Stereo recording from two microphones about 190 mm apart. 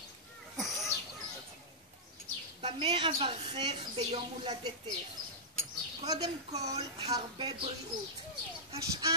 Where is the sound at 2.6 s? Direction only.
30° right (ahead or behind).